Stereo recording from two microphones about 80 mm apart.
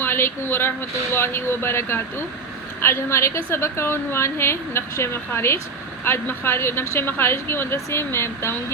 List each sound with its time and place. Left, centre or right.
0.0 s a woman's voice: left